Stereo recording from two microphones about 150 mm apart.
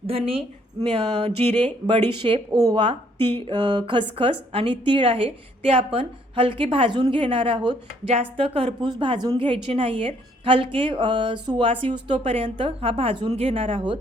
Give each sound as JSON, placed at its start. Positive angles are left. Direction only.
{"t": 0.1, "sound": "a woman's voice", "side_deg": -40}
{"t": 2.7, "sound": "a woman's voice", "side_deg": -35}